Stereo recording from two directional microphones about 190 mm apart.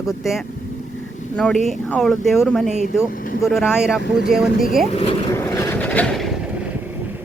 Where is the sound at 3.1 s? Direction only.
45° left (ahead or behind).